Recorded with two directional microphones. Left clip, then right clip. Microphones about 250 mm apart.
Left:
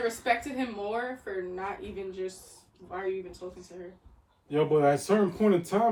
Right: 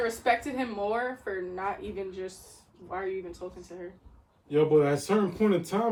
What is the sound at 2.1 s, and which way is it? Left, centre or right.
Speech, centre.